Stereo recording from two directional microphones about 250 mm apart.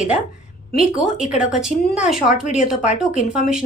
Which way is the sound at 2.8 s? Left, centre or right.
Left.